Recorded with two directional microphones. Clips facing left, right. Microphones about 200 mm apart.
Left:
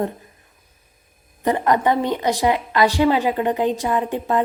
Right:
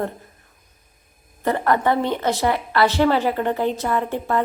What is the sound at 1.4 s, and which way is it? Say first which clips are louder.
A woman's voice: left 1 dB; 15° left (ahead or behind).